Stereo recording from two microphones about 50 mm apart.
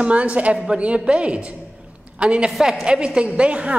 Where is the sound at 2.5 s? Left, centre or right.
Centre.